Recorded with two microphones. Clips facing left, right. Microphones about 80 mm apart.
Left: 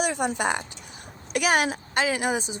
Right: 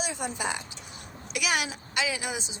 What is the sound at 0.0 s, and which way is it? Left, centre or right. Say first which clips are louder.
A woman's voice: left 7 dB; left.